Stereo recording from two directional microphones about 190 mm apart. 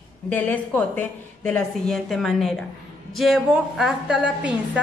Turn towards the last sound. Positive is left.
turn(degrees=-5)  # may be behind; listen again after turning